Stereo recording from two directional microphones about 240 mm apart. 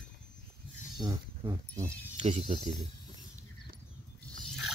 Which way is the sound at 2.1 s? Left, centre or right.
Right.